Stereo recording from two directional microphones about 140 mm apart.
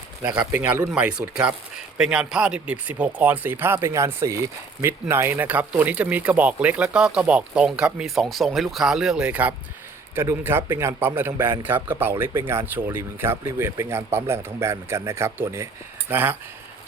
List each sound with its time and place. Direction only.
0.5 s speech: 10° right (ahead or behind)